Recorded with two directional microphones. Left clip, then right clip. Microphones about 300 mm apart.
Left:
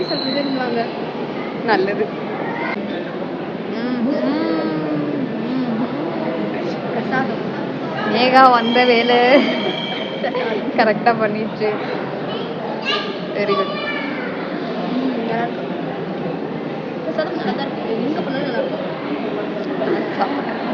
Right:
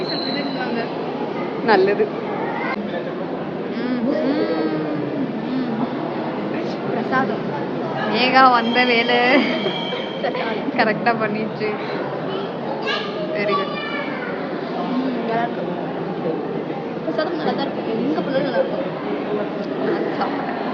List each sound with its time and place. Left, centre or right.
1.6 s speech: centre
4.3 s a sound: centre
8.1 s a woman's voice: centre
10.8 s a woman's voice: centre